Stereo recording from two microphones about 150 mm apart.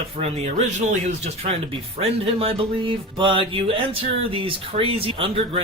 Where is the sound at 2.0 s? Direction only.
40° right (ahead or behind).